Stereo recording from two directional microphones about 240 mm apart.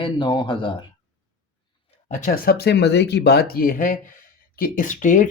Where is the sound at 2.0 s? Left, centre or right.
Left.